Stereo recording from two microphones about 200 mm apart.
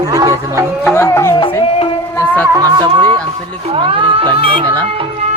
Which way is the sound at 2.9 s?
25° right (ahead or behind).